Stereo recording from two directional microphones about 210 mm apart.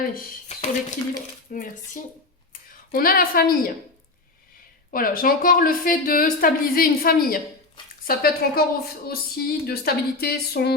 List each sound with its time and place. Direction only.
0.4 s a sound: 30° left (ahead or behind)
1.5 s speech: 40° left (ahead or behind)
4.9 s speech: 40° left (ahead or behind)